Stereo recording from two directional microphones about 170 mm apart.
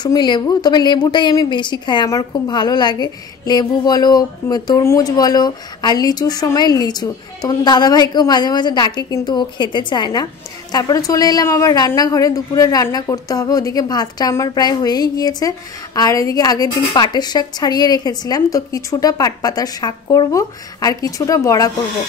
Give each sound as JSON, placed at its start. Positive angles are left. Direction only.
{"t": 0.0, "sound": "a woman's voice", "side_deg": 25}